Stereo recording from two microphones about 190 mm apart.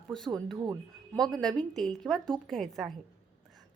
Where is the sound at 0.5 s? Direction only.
20° right (ahead or behind).